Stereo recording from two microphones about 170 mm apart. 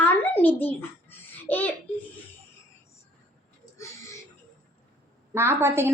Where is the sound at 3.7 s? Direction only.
15° left (ahead or behind).